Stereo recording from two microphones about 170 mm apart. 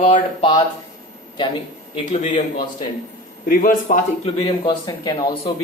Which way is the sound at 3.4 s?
55° left (ahead or behind).